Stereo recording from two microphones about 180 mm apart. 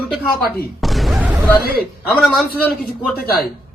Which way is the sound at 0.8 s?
Centre (ahead or behind).